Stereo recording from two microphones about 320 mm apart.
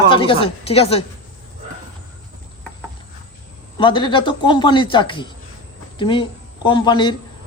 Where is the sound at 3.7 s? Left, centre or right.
Centre.